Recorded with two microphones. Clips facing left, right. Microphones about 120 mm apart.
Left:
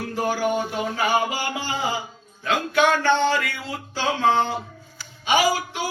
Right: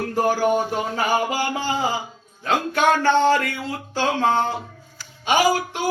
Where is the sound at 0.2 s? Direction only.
45° right (ahead or behind).